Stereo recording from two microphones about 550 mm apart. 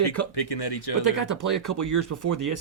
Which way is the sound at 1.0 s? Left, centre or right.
Right.